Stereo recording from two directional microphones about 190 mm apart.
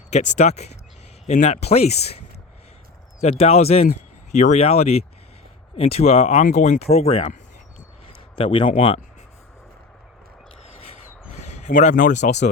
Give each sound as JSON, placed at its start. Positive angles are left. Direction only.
{"t": 0.1, "sound": "speech", "side_deg": 35}
{"t": 3.2, "sound": "speech", "side_deg": 35}
{"t": 8.0, "sound": "a sound", "side_deg": 30}
{"t": 11.3, "sound": "speech", "side_deg": 35}